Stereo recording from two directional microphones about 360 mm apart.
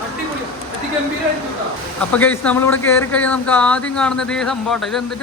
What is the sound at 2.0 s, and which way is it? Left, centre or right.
Speech, centre.